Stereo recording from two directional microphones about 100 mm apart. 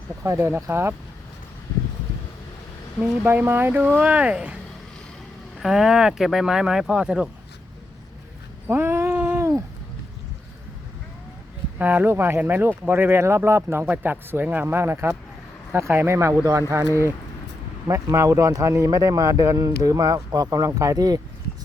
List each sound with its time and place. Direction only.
0.2 s speech: 25° right (ahead or behind)
3.0 s speech: 20° right (ahead or behind)
5.5 s speech: 5° right (ahead or behind)
8.6 s a sound: 20° right (ahead or behind)
11.8 s speech: 15° right (ahead or behind); by 21.2 s 35° right (ahead or behind)